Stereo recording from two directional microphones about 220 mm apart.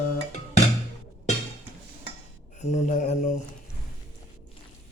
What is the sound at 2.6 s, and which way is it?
Speech, 30° left (ahead or behind).